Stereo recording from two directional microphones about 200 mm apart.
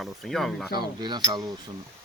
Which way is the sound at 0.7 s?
20° right (ahead or behind).